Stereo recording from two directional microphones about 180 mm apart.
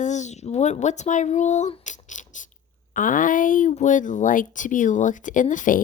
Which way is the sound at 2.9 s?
50° left (ahead or behind).